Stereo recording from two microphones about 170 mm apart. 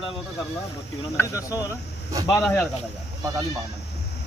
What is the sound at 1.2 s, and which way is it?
Speech, 20° left (ahead or behind).